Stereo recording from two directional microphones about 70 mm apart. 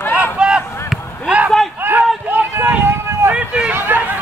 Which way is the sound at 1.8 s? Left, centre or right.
Right.